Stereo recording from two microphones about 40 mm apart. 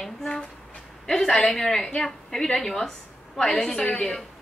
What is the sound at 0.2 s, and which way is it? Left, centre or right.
A woman's voice, centre.